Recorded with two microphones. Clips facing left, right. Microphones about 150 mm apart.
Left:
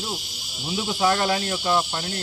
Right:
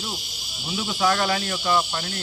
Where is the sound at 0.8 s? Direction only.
25° left (ahead or behind).